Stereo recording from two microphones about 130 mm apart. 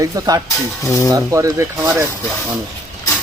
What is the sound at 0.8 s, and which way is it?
Speech, 25° left (ahead or behind).